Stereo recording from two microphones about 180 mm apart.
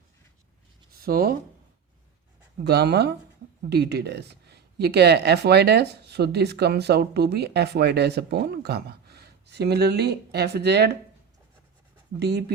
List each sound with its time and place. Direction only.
0.9 s speech: 55° right (ahead or behind)
2.6 s speech: 65° right (ahead or behind)
12.2 s speech: 65° right (ahead or behind)